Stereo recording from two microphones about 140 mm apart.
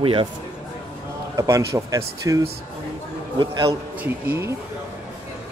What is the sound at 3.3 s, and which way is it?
Speech, 35° right (ahead or behind).